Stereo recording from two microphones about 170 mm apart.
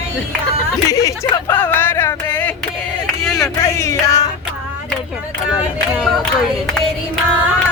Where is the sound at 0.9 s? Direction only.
20° left (ahead or behind).